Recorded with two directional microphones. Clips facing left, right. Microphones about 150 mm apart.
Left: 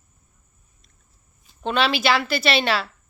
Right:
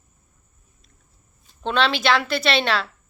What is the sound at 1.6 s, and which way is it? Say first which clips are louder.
A woman's voice: even; 5° left (ahead or behind).